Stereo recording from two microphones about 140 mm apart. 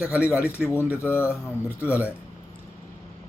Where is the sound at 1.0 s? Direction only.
15° left (ahead or behind).